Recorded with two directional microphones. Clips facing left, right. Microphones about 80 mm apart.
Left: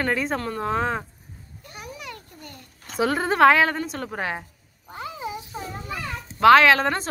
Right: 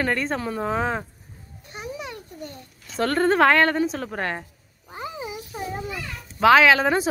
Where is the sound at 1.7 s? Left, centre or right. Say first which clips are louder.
Right 4 dB; right.